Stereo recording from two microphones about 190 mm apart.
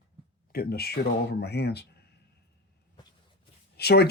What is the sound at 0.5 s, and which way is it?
Speech, 55° left (ahead or behind).